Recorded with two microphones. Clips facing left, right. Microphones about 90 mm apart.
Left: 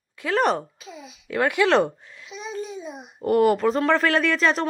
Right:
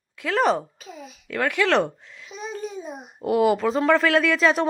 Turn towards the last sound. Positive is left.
turn(degrees=0)  # may be behind; listen again after turning